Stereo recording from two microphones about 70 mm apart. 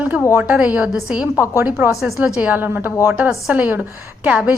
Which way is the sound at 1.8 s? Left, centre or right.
Right.